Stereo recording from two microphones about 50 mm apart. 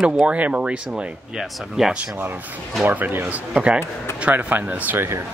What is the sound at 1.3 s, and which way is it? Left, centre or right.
Speech, centre.